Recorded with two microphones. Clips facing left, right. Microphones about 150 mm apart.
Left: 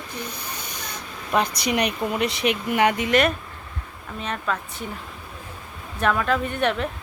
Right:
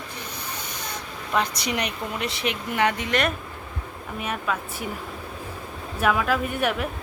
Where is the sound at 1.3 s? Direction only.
15° left (ahead or behind).